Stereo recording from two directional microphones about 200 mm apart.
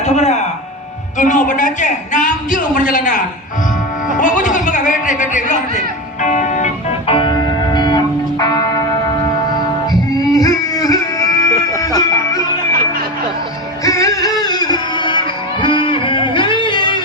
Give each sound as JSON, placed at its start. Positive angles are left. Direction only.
{"t": 0.0, "sound": "a man's voice", "side_deg": 35}
{"t": 4.2, "sound": "a sound", "side_deg": 40}
{"t": 6.2, "sound": "music", "side_deg": 35}
{"t": 7.1, "sound": "music", "side_deg": 25}
{"t": 9.9, "sound": "music", "side_deg": 20}
{"t": 13.8, "sound": "music", "side_deg": 15}